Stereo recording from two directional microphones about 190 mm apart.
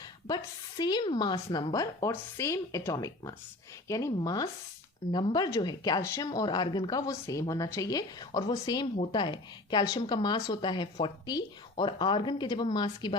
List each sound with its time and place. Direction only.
0.3 s speech: 20° left (ahead or behind)